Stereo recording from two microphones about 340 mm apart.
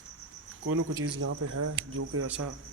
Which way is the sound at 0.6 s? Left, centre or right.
Right.